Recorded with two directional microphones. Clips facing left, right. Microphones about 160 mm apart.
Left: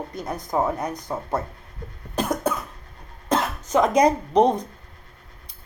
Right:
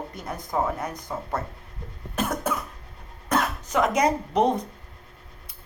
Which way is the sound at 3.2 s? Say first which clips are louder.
Left 1 dB; 25° left (ahead or behind).